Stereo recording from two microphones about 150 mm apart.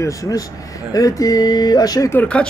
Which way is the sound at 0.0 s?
20° left (ahead or behind).